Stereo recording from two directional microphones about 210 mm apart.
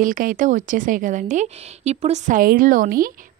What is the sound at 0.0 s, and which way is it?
A woman's voice, 40° right (ahead or behind).